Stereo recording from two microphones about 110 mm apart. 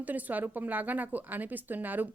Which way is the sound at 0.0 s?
15° right (ahead or behind).